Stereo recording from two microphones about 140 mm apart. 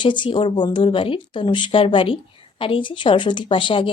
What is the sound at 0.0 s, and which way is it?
Speech, 35° left (ahead or behind).